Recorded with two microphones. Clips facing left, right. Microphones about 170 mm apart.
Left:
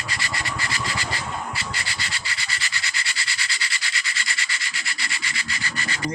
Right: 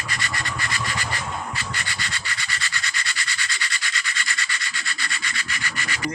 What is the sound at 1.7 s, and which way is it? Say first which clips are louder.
Rub: right 1 dB; 25° left (ahead or behind).